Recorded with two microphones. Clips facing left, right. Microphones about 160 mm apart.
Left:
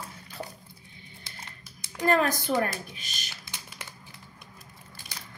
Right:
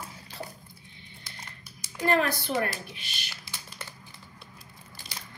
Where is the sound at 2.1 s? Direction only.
45° left (ahead or behind).